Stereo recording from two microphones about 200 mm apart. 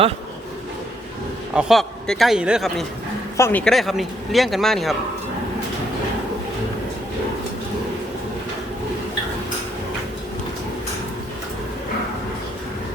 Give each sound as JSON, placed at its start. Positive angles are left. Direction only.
{"t": 1.5, "sound": "speech", "side_deg": 0}
{"t": 3.3, "sound": "speech", "side_deg": 10}